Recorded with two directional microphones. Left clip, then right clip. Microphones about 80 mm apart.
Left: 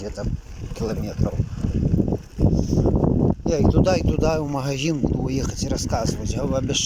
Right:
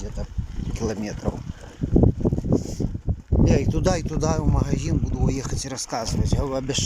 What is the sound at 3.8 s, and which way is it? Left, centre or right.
Speech, centre.